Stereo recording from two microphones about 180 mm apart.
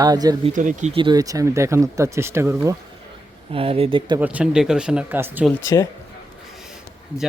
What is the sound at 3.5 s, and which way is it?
Speech, 30° right (ahead or behind).